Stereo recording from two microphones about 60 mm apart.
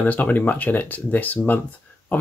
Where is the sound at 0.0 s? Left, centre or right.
Left.